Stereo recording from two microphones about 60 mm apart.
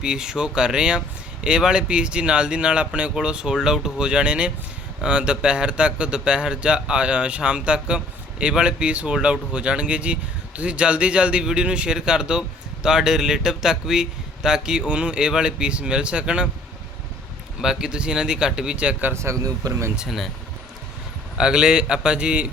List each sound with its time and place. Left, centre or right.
0.0 s speech: centre
17.6 s speech: centre
19.1 s a man's voice: right
19.4 s speech: right
20.0 s speech: centre
21.3 s speech: centre